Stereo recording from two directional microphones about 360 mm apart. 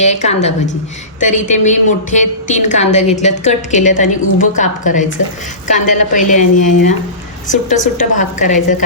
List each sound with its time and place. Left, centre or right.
0.0 s a woman's voice: centre